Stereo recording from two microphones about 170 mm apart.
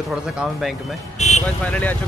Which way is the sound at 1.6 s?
10° left (ahead or behind).